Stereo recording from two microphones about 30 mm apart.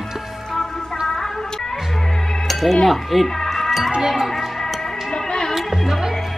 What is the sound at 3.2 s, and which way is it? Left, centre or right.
Music, centre.